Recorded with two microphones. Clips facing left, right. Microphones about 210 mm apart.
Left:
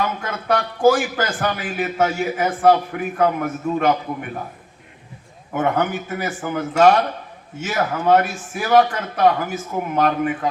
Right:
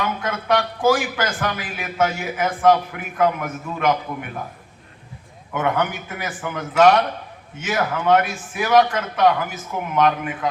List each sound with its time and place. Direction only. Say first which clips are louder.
0.0 s a man's voice: even; 40° left (ahead or behind)
5.5 s a man's voice: left 2 dB; 40° left (ahead or behind)